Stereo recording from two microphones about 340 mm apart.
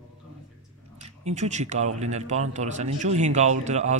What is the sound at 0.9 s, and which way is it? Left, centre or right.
A man's voice, centre.